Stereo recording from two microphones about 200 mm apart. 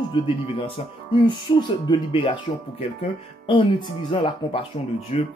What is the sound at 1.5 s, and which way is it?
Speech, 25° left (ahead or behind).